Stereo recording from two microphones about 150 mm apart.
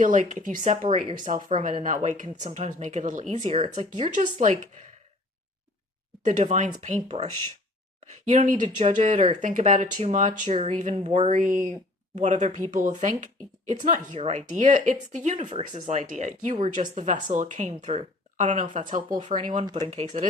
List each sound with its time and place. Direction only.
0.0 s speech: 55° right (ahead or behind)
6.2 s speech: 55° right (ahead or behind)
16.8 s speech: 60° right (ahead or behind)
19.6 s speech: 25° right (ahead or behind)
19.9 s speech: 45° right (ahead or behind)